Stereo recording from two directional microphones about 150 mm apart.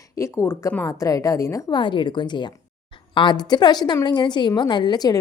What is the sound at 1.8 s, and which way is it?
A woman's voice, 35° left (ahead or behind).